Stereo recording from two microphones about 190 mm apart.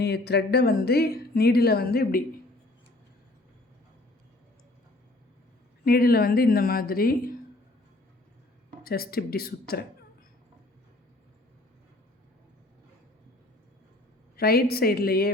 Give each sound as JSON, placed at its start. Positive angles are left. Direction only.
{"t": 0.0, "sound": "a woman's voice", "side_deg": 60}
{"t": 5.8, "sound": "speech", "side_deg": 55}
{"t": 8.8, "sound": "speech", "side_deg": 50}
{"t": 14.3, "sound": "speech", "side_deg": 55}